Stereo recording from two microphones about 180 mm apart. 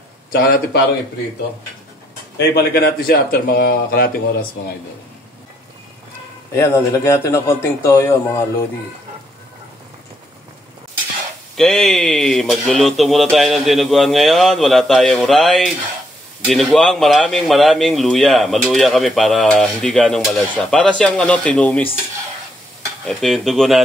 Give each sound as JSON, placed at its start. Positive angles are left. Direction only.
{"t": 0.3, "sound": "a man's voice", "side_deg": 55}
{"t": 2.3, "sound": "a man's voice", "side_deg": 65}
{"t": 6.5, "sound": "speech", "side_deg": 15}
{"t": 11.5, "sound": "speech", "side_deg": 0}
{"t": 23.0, "sound": "speech", "side_deg": 0}